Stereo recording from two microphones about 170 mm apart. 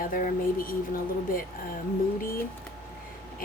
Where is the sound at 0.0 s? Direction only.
55° left (ahead or behind).